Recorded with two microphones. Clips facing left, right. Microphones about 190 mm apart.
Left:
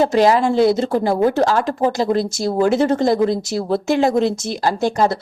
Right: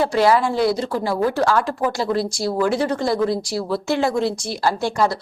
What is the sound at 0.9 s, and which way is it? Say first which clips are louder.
Speech: left 5 dB; 45° left (ahead or behind).